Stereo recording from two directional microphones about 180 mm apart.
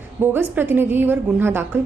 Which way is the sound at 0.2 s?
10° right (ahead or behind).